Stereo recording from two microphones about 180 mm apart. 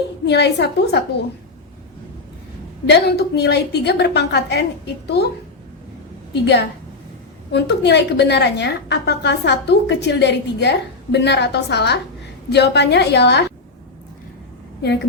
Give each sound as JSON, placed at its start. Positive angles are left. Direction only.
{"t": 0.3, "sound": "a woman's voice", "side_deg": 70}
{"t": 2.8, "sound": "a woman's voice", "side_deg": 65}
{"t": 6.3, "sound": "a woman's voice", "side_deg": 70}